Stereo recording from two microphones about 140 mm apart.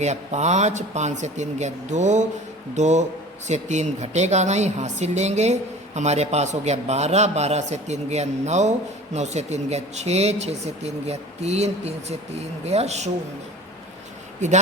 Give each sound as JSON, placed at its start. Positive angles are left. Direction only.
{"t": 0.0, "sound": "speech", "side_deg": -55}